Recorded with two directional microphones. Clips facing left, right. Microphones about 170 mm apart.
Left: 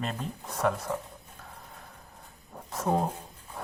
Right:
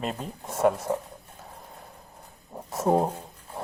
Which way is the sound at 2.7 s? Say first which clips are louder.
Right 5 dB; 30° right (ahead or behind).